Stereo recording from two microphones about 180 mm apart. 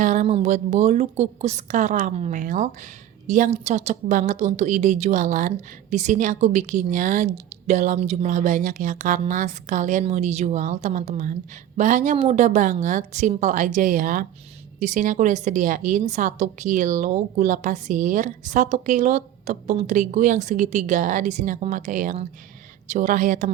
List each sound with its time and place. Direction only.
0.0 s a woman's voice: 45° right (ahead or behind)